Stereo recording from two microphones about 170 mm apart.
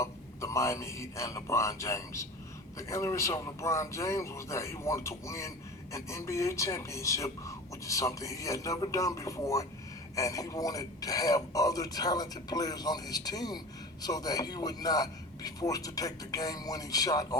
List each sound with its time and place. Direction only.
0.0 s a man's voice: 15° left (ahead or behind)